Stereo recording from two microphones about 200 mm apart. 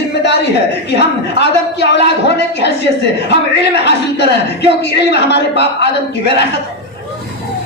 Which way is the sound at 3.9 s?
60° left (ahead or behind).